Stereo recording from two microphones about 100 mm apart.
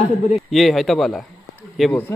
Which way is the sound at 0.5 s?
Centre (ahead or behind).